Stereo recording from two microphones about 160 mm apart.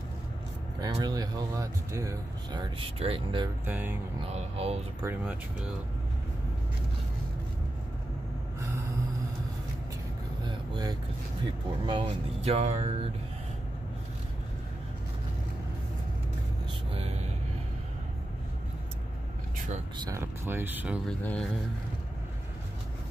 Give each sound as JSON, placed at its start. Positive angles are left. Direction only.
{"t": 0.7, "sound": "speech", "side_deg": -25}
{"t": 2.5, "sound": "speech", "side_deg": -30}
{"t": 3.6, "sound": "speech", "side_deg": -10}
{"t": 4.2, "sound": "speech", "side_deg": -40}
{"t": 5.0, "sound": "speech", "side_deg": -10}
{"t": 8.5, "sound": "snort", "side_deg": -20}
{"t": 10.4, "sound": "vehicle", "side_deg": -25}
{"t": 11.4, "sound": "speech", "side_deg": -35}
{"t": 16.9, "sound": "music", "side_deg": -40}
{"t": 20.1, "sound": "speech", "side_deg": -15}
{"t": 21.1, "sound": "speech", "side_deg": 5}